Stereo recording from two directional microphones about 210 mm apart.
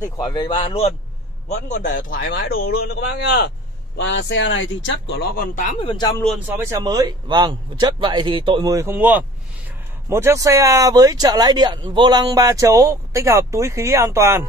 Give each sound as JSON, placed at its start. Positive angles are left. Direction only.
{"t": 0.0, "sound": "speech", "side_deg": 20}
{"t": 1.7, "sound": "a man's voice", "side_deg": 40}
{"t": 6.2, "sound": "a man's voice", "side_deg": 0}
{"t": 6.5, "sound": "speech", "side_deg": -15}